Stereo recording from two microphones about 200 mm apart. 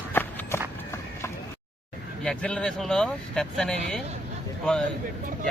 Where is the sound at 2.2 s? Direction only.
5° left (ahead or behind).